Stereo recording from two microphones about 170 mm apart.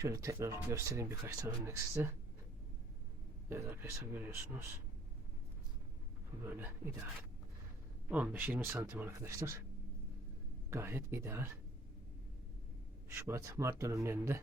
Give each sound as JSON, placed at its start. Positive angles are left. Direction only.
{"t": 0.0, "sound": "speech", "side_deg": -20}
{"t": 3.5, "sound": "speech", "side_deg": -15}
{"t": 6.4, "sound": "speech", "side_deg": -10}
{"t": 8.1, "sound": "speech", "side_deg": -10}
{"t": 10.7, "sound": "speech", "side_deg": -15}
{"t": 13.1, "sound": "speech", "side_deg": -15}